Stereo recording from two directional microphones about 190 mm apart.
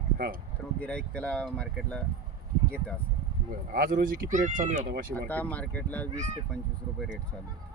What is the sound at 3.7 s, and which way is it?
Speech, 50° right (ahead or behind).